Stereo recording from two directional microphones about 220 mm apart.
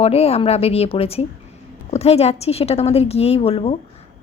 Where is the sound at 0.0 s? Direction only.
25° left (ahead or behind).